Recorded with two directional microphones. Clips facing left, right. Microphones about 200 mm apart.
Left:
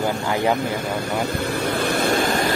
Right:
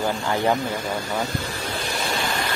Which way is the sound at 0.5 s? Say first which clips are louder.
Left 2 dB; 60° left (ahead or behind).